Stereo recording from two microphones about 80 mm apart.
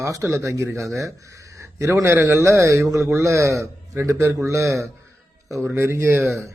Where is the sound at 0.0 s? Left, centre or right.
Right.